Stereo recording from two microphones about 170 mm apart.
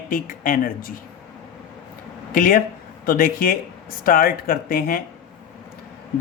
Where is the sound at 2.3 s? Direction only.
55° left (ahead or behind).